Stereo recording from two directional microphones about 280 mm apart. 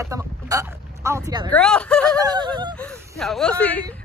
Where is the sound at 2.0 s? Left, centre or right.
Centre.